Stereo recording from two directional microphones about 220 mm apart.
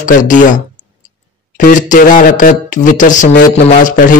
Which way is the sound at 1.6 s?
35° left (ahead or behind).